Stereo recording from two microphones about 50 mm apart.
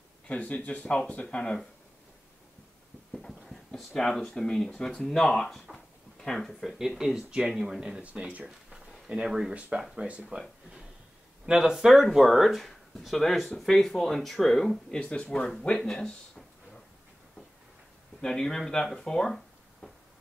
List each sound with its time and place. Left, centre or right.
0.3 s speech: left
3.1 s clip-clop: centre
3.4 s a sound: centre
4.3 s speech: centre
6.7 s speech: centre
8.0 s speech: right
8.5 s a sound: centre
9.1 s speech: centre
9.5 s speech: right
11.4 s speech: centre
15.6 s a sound: centre
18.2 s speech: centre
19.8 s a sound: centre